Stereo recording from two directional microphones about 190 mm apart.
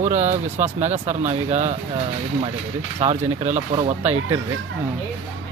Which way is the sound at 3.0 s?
35° right (ahead or behind).